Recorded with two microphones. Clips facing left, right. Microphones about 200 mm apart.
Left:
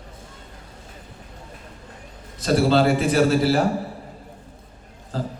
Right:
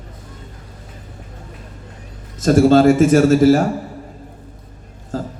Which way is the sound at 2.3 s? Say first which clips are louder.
Right 7 dB; 45° right (ahead or behind).